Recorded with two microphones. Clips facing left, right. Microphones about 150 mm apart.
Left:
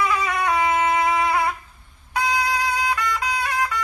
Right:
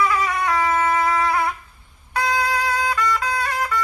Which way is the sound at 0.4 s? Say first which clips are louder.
Left 1 dB; 15° left (ahead or behind).